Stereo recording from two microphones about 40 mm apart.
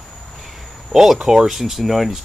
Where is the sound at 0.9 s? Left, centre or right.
Centre.